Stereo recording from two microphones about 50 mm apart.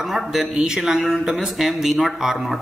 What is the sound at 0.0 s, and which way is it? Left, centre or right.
A man's voice, centre.